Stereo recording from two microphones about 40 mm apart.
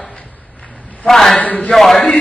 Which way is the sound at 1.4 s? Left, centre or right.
Left.